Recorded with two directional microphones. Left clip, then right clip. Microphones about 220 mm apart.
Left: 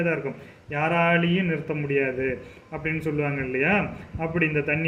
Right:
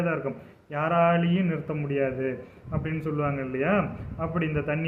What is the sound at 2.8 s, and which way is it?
A man's voice, 5° right (ahead or behind).